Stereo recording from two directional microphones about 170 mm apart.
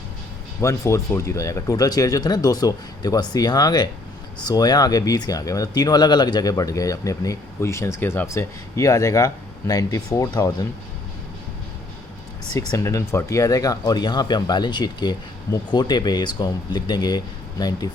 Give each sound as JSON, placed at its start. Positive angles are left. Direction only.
{"t": 0.6, "sound": "speech", "side_deg": 20}
{"t": 12.5, "sound": "speech", "side_deg": 15}